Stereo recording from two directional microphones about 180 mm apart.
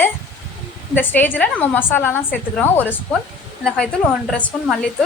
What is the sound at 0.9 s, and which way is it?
A woman's voice, 10° left (ahead or behind).